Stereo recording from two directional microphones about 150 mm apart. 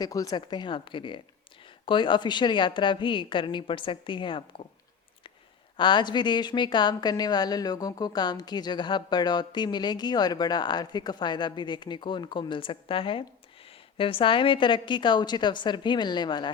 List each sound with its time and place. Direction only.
0.0 s a woman's voice: 25° left (ahead or behind)
5.7 s a woman's voice: 30° left (ahead or behind)